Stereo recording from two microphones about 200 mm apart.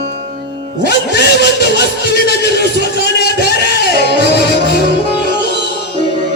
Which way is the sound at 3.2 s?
50° left (ahead or behind).